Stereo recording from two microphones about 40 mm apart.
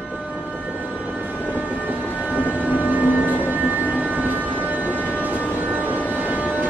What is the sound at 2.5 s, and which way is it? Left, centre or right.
Vehicle, right.